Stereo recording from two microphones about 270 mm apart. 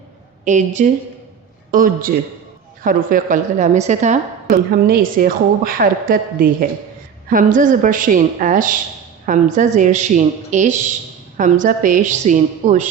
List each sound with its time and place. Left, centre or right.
0.4 s a woman's voice: right